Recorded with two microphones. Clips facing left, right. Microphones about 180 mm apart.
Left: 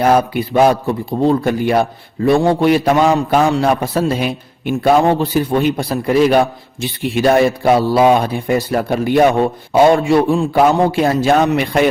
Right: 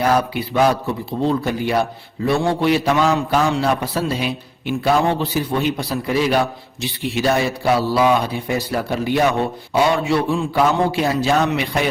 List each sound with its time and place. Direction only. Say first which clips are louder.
0.0 s a man's voice: left 5 dB; 50° left (ahead or behind)